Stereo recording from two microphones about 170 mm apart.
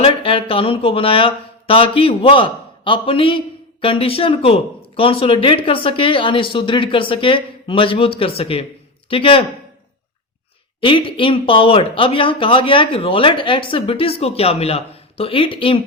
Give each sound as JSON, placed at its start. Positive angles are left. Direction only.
{"t": 0.0, "sound": "a man's voice", "side_deg": 30}
{"t": 10.8, "sound": "speech", "side_deg": 30}